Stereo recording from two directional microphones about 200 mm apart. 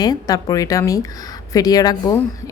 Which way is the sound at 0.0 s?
20° left (ahead or behind).